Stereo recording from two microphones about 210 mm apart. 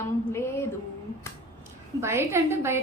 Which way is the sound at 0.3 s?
10° left (ahead or behind).